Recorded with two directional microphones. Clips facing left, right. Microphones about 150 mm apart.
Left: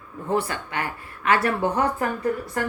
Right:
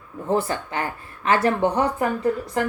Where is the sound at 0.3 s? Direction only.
30° right (ahead or behind).